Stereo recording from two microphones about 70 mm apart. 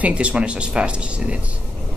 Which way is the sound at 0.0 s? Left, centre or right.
Centre.